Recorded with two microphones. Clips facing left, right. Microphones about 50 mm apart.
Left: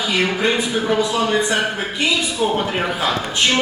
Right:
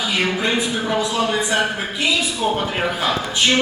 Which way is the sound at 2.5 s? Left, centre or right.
Centre.